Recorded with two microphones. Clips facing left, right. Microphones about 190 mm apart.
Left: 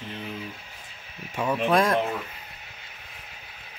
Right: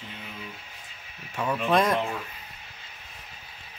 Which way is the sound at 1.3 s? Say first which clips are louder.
Left 2 dB; 15° left (ahead or behind).